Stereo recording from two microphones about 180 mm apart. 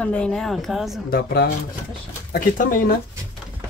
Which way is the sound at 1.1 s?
65° left (ahead or behind).